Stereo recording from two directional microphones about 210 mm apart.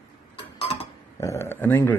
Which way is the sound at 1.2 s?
15° left (ahead or behind).